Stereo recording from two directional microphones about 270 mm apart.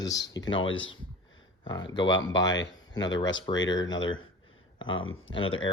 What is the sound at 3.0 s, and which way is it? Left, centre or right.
Speech, left.